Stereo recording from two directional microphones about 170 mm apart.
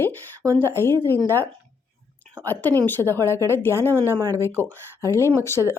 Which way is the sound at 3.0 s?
15° right (ahead or behind).